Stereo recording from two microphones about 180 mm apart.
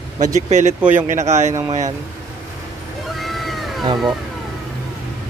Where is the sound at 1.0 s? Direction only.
40° right (ahead or behind).